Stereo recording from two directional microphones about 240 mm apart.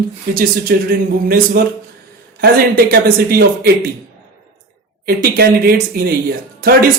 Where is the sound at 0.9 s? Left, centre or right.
Right.